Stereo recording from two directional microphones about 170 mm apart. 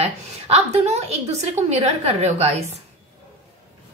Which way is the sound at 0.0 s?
40° right (ahead or behind).